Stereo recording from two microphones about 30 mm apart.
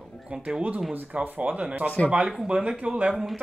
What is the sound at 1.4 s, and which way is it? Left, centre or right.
Speech, right.